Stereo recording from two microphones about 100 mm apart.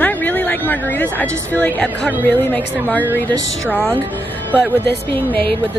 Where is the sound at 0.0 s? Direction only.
15° left (ahead or behind).